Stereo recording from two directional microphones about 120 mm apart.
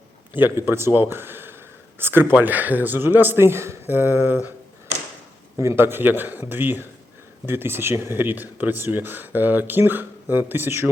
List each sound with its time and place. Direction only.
0.3 s a man's voice: 15° right (ahead or behind)
5.5 s speech: 20° right (ahead or behind)